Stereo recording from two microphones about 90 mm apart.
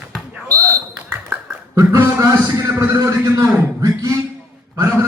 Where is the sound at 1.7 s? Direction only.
35° right (ahead or behind).